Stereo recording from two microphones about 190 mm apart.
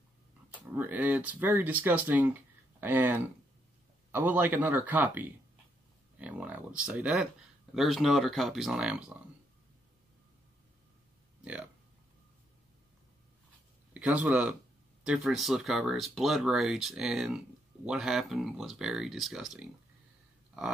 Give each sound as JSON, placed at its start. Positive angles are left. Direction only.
{"t": 0.7, "sound": "speech", "side_deg": -10}
{"t": 11.4, "sound": "speech", "side_deg": -5}
{"t": 13.9, "sound": "speech", "side_deg": -5}